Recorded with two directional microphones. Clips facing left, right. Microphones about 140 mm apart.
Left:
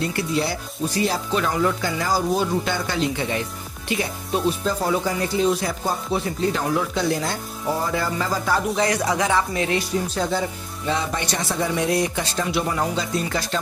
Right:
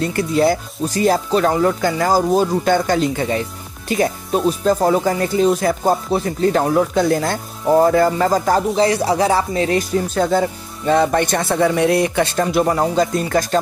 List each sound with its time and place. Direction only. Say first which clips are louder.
0.1 s speech: right 8 dB; 50° right (ahead or behind)
8.7 s speech: right 6 dB; 30° right (ahead or behind); by 13.6 s 45° right (ahead or behind)